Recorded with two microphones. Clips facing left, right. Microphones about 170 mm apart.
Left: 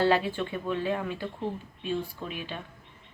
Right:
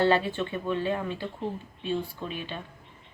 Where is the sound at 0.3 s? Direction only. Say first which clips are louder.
Right 1 dB; 5° left (ahead or behind).